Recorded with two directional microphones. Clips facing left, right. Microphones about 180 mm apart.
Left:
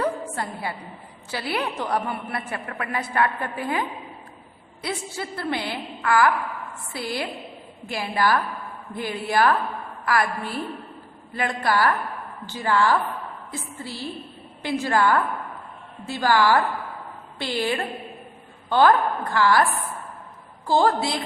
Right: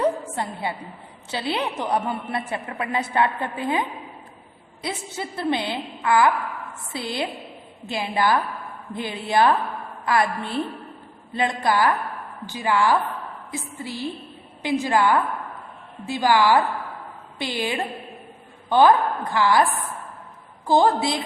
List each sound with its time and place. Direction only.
0.0 s a sound: 20° right (ahead or behind)
1.3 s a woman's voice: 25° right (ahead or behind)
20.7 s a woman's voice: 20° right (ahead or behind)